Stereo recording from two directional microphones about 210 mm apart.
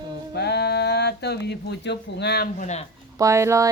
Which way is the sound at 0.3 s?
50° left (ahead or behind).